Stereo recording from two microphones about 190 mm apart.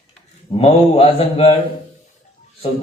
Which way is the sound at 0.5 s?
30° left (ahead or behind).